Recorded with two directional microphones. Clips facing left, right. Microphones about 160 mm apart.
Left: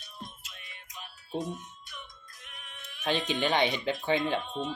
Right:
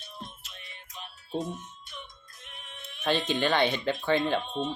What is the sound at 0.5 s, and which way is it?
Music, 30° right (ahead or behind).